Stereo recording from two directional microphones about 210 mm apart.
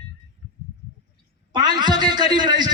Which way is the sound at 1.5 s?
20° right (ahead or behind).